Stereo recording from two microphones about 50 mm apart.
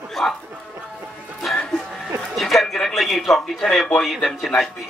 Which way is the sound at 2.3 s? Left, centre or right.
Centre.